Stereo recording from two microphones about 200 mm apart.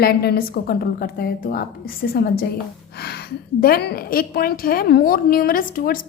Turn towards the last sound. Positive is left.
turn(degrees=45)  # may be behind; listen again after turning